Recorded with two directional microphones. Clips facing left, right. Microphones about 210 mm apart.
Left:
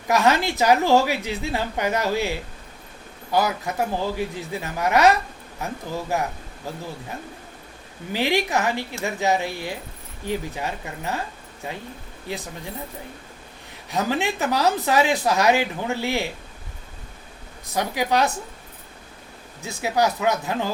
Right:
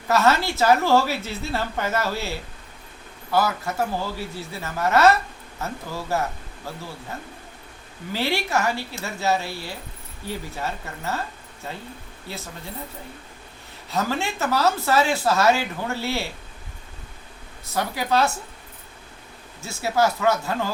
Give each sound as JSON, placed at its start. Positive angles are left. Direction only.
{"t": 0.1, "sound": "speech", "side_deg": 15}
{"t": 8.1, "sound": "speech", "side_deg": 15}
{"t": 13.9, "sound": "speech", "side_deg": 15}
{"t": 17.7, "sound": "speech", "side_deg": 15}
{"t": 19.6, "sound": "speech", "side_deg": 15}